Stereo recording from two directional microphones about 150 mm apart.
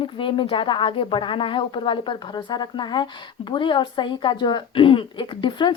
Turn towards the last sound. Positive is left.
turn(degrees=30)  # may be behind; listen again after turning